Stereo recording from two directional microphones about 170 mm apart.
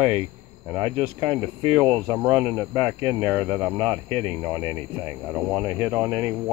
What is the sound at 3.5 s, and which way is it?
Speech, 20° right (ahead or behind).